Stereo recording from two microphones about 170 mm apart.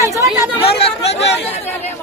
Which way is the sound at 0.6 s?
35° left (ahead or behind).